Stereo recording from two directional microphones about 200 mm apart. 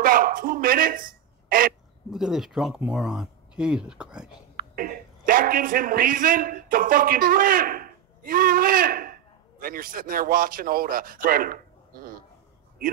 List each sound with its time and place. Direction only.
0.0 s a man's voice: 45° right (ahead or behind)
2.0 s speech: centre (ahead or behind)
4.6 s speech: 45° right (ahead or behind)